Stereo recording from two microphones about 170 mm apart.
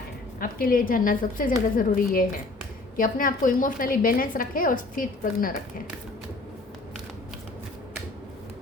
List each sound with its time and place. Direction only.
0.3 s a woman's voice: 55° left (ahead or behind)